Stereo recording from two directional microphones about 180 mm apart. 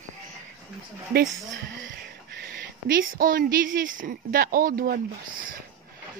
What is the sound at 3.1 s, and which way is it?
Speech, 55° right (ahead or behind).